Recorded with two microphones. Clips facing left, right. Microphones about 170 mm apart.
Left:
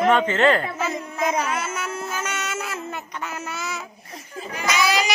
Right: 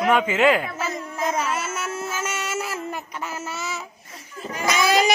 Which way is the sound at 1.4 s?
5° right (ahead or behind).